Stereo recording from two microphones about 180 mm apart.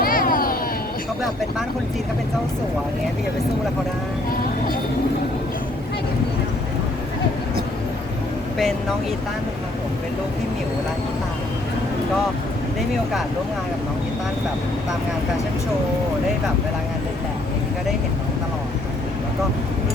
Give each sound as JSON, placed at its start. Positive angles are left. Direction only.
{"t": 0.0, "sound": "vehicle", "side_deg": 50}